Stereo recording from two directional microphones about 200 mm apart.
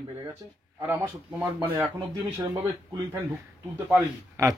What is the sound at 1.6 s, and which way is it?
Speech, 10° right (ahead or behind).